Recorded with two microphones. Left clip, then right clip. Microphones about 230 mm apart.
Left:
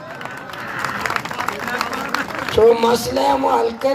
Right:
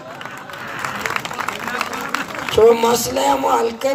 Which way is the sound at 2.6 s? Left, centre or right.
Right.